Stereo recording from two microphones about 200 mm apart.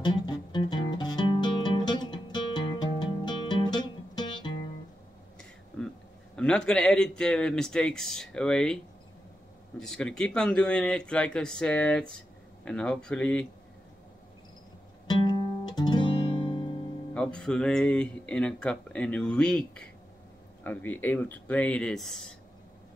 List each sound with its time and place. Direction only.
0.0 s music: 20° left (ahead or behind)
6.3 s speech: 5° left (ahead or behind)
15.0 s guitar: 20° left (ahead or behind)
17.1 s speech: 5° left (ahead or behind)